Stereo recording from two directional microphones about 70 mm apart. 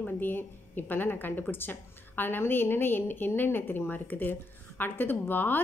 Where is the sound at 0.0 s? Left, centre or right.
Left.